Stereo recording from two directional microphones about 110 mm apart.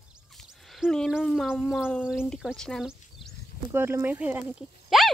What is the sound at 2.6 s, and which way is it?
Speech, 5° left (ahead or behind).